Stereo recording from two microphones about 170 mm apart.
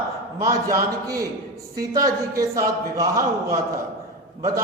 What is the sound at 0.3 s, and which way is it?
A man's voice, 20° right (ahead or behind).